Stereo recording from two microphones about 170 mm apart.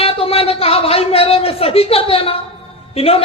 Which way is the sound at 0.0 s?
35° left (ahead or behind).